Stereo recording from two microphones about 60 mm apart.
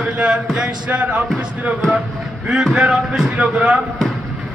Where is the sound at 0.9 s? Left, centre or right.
Right.